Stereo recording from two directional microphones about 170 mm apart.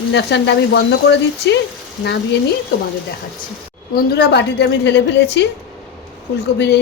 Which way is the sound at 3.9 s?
70° left (ahead or behind).